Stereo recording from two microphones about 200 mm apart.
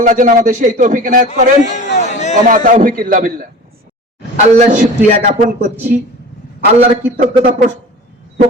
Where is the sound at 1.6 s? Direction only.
35° left (ahead or behind).